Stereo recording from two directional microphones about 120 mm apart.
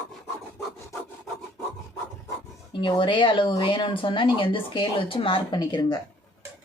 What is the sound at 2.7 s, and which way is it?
A woman's voice, 40° left (ahead or behind).